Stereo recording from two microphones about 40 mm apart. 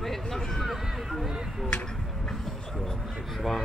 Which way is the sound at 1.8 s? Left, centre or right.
Centre.